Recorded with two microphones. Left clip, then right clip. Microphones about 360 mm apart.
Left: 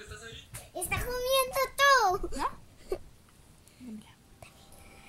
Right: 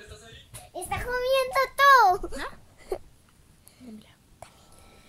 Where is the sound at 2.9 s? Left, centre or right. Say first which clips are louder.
Right 3 dB; centre.